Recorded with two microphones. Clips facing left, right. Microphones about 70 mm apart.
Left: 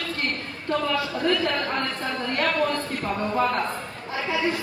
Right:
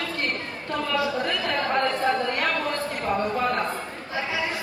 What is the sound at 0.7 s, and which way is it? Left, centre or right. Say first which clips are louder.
A woman's voice: even; centre.